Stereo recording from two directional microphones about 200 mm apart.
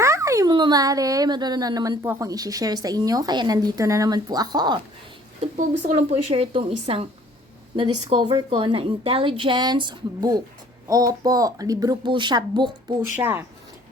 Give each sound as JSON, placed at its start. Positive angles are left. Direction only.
{"t": 0.0, "sound": "speech", "side_deg": -15}
{"t": 5.4, "sound": "speech", "side_deg": -35}
{"t": 8.1, "sound": "speech", "side_deg": -20}
{"t": 13.0, "sound": "a woman's voice", "side_deg": -10}